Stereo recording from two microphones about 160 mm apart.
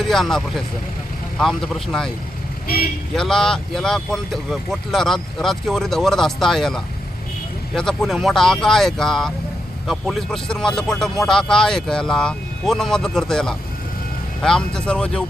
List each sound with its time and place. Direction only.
0.0 s speech: centre (ahead or behind)
2.6 s speech: 70° left (ahead or behind)
3.2 s speech: 5° left (ahead or behind)